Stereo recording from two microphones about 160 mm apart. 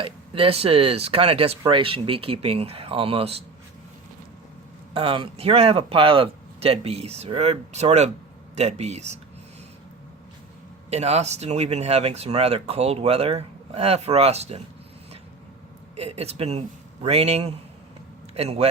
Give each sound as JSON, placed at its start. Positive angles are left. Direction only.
{"t": 0.0, "sound": "speech", "side_deg": -35}
{"t": 4.9, "sound": "speech", "side_deg": -35}
{"t": 10.8, "sound": "speech", "side_deg": -45}
{"t": 16.0, "sound": "speech", "side_deg": -40}